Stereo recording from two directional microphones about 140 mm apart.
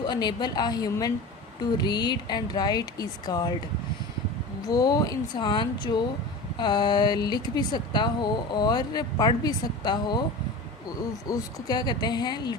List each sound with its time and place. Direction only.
0.0 s speech: 30° left (ahead or behind)
4.6 s speech: 30° left (ahead or behind)
11.3 s speech: 30° left (ahead or behind)